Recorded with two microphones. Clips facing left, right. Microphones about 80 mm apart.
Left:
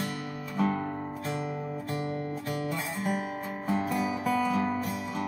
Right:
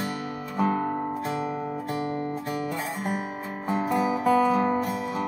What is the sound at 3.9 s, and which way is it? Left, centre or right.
Music, right.